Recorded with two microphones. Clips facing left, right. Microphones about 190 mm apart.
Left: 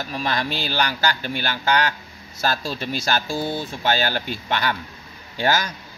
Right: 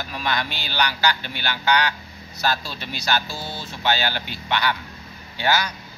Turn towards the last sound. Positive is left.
turn(degrees=45)  # may be behind; listen again after turning